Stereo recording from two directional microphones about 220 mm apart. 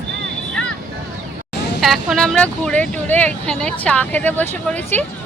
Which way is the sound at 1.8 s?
Centre (ahead or behind).